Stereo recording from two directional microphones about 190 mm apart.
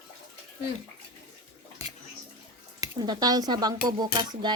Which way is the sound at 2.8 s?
20° right (ahead or behind).